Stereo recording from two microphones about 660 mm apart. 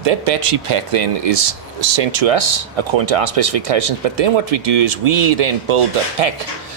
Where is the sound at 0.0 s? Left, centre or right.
Right.